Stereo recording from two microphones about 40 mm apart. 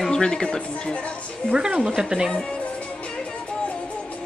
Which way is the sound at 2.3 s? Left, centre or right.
Left.